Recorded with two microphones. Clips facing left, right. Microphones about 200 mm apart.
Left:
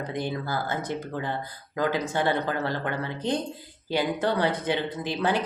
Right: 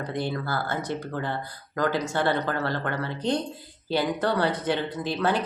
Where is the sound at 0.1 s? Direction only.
15° left (ahead or behind).